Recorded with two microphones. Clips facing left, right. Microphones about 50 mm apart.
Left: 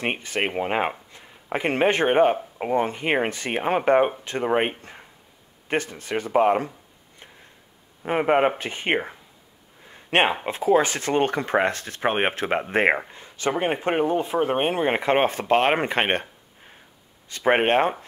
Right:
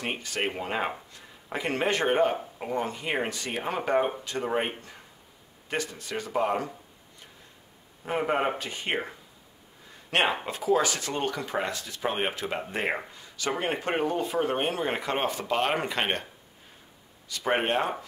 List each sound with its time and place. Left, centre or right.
0.0 s speech: left
8.0 s speech: left
10.1 s speech: left
17.3 s speech: left